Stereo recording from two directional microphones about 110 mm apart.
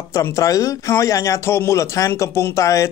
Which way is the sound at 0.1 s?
30° left (ahead or behind).